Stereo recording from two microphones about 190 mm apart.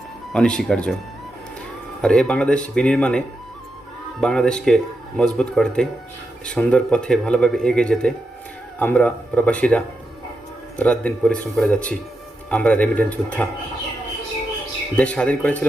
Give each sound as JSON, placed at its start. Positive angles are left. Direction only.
{"t": 0.3, "sound": "speech", "side_deg": 5}
{"t": 2.0, "sound": "speech", "side_deg": 5}
{"t": 14.9, "sound": "speech", "side_deg": 5}